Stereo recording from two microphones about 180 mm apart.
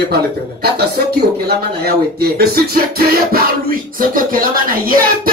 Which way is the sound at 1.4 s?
60° right (ahead or behind).